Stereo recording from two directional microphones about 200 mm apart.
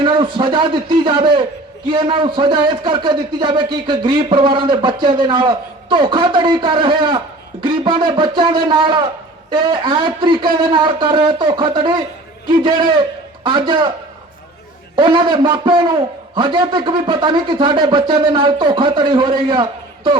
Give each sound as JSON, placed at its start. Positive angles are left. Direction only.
{"t": 0.0, "sound": "a man's voice", "side_deg": -25}
{"t": 14.9, "sound": "a man's voice", "side_deg": -25}